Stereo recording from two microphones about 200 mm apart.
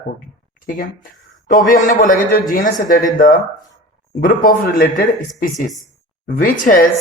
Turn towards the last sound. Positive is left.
turn(degrees=45)  # may be behind; listen again after turning